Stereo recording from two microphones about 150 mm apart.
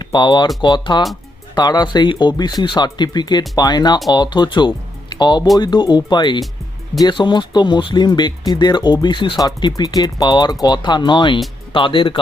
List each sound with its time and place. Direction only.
0.0 s speech: 30° left (ahead or behind)